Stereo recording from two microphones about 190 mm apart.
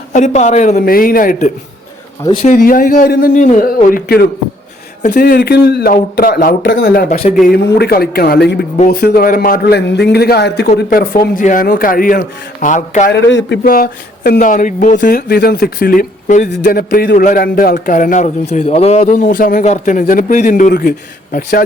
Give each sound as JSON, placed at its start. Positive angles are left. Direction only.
{"t": 0.1, "sound": "a woman's voice", "side_deg": 40}
{"t": 7.1, "sound": "a woman's voice", "side_deg": 40}
{"t": 7.4, "sound": "a man's voice", "side_deg": 55}
{"t": 13.1, "sound": "speech", "side_deg": 65}
{"t": 13.7, "sound": "a man's voice", "side_deg": 50}